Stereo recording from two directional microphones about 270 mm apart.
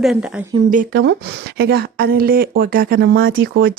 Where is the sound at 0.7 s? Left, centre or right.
Right.